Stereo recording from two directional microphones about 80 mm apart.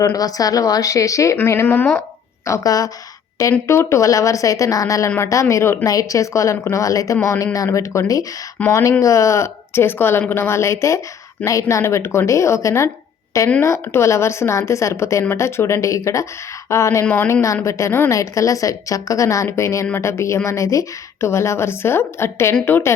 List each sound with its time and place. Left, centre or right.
0.0 s a woman's voice: left
1.5 s speech: left
2.4 s a woman's voice: left
3.7 s a woman's voice: left